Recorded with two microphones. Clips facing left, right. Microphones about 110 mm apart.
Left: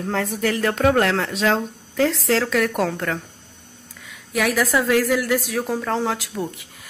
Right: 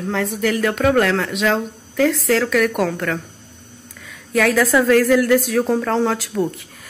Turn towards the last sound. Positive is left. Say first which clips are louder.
# right 4 dB
turn(degrees=15)  # may be behind; listen again after turning